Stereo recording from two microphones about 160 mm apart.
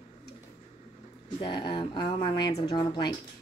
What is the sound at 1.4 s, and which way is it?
Speech, 30° left (ahead or behind).